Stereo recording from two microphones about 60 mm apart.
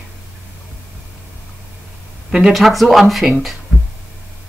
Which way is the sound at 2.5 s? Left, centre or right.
Centre.